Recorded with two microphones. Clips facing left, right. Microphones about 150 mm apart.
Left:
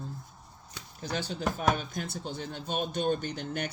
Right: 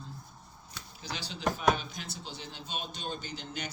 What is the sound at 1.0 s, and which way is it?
Speech, 50° left (ahead or behind).